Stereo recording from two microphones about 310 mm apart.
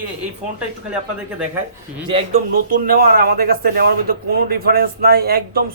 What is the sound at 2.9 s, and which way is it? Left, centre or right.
A man's voice, right.